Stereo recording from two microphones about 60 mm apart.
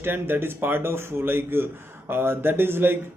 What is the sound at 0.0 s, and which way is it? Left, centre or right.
A man's voice, right.